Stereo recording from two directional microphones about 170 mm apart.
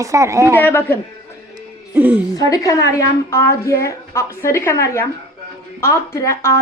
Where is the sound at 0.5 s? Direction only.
10° left (ahead or behind).